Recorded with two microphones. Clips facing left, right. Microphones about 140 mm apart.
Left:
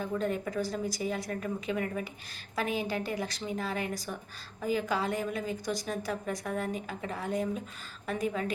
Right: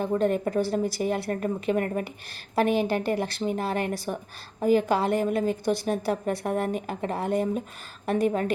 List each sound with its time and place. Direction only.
0.2 s a woman's voice: 60° right (ahead or behind)
2.6 s a woman's voice: 70° right (ahead or behind)